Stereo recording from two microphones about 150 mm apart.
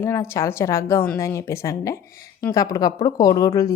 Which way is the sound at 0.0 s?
15° left (ahead or behind).